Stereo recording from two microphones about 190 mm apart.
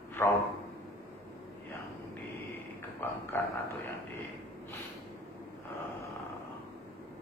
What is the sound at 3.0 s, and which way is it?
Speech, 10° left (ahead or behind).